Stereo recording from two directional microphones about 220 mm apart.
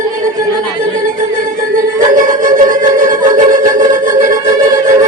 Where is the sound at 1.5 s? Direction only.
35° right (ahead or behind).